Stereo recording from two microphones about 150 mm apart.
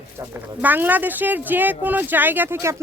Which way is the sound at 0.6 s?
10° right (ahead or behind).